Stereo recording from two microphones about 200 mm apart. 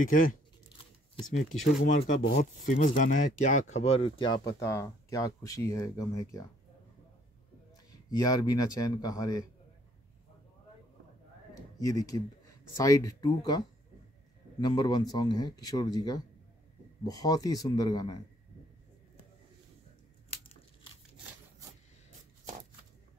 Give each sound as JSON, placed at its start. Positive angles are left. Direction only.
{"t": 0.1, "sound": "speech", "side_deg": 40}
{"t": 1.8, "sound": "speech", "side_deg": 30}
{"t": 2.2, "sound": "speech", "side_deg": 40}
{"t": 7.9, "sound": "speech", "side_deg": 20}
{"t": 11.5, "sound": "a sound", "side_deg": 20}
{"t": 12.7, "sound": "speech", "side_deg": 15}